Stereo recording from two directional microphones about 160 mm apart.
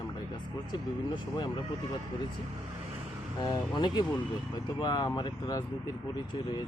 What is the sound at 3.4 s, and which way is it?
Speech, 25° left (ahead or behind).